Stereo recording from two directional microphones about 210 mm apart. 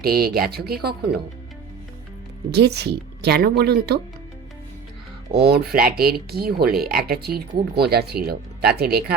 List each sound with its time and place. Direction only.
0.0 s speech: 45° right (ahead or behind)
2.5 s speech: 50° right (ahead or behind)
5.3 s speech: 50° right (ahead or behind)